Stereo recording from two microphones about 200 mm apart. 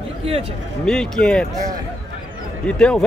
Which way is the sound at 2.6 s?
5° left (ahead or behind).